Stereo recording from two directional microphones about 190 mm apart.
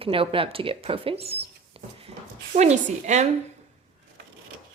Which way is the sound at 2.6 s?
35° right (ahead or behind).